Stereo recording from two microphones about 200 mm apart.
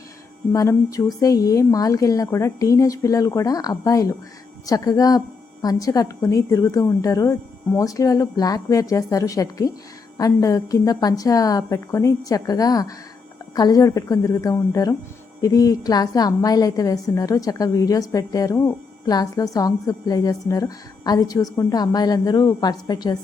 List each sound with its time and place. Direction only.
0.5 s a woman's voice: 15° left (ahead or behind)